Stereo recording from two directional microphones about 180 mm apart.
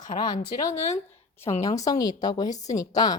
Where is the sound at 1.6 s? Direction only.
20° left (ahead or behind).